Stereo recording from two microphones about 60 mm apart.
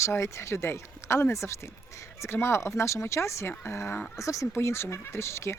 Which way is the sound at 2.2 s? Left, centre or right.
Left.